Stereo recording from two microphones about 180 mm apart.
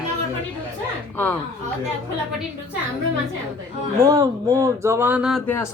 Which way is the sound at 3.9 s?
20° right (ahead or behind).